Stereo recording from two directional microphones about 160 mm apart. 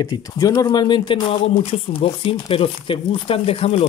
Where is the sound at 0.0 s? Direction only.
25° left (ahead or behind).